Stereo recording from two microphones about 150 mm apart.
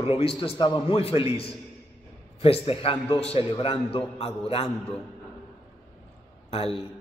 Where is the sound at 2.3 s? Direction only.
40° left (ahead or behind).